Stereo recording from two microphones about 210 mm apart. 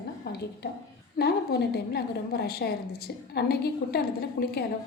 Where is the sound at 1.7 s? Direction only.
50° left (ahead or behind).